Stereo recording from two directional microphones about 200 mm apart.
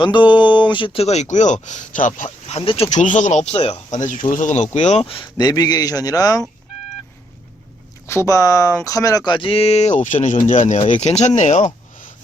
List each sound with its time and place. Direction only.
0.0 s speech: 20° left (ahead or behind)
4.0 s a man's voice: 40° left (ahead or behind); by 6.4 s 20° left (ahead or behind)
8.0 s speech: 15° left (ahead or behind); by 11.6 s 35° left (ahead or behind)